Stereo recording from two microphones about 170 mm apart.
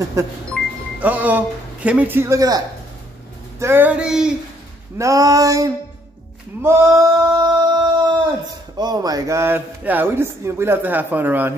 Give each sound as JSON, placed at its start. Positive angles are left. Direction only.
{"t": 0.2, "sound": "speech", "side_deg": -15}
{"t": 4.9, "sound": "female singing", "side_deg": -20}
{"t": 6.6, "sound": "singing", "side_deg": -15}